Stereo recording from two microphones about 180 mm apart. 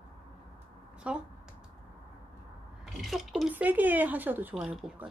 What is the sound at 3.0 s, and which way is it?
Speech, centre (ahead or behind).